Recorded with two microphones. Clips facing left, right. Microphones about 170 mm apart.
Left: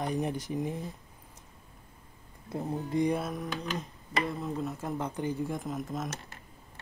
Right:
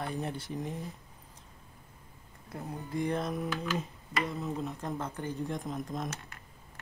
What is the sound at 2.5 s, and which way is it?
Speech, 20° left (ahead or behind).